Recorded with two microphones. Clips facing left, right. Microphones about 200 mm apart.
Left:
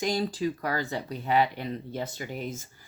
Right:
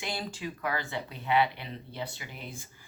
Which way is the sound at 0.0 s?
40° left (ahead or behind).